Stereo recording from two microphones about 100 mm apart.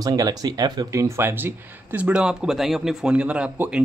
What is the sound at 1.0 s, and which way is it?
Speech, 25° right (ahead or behind).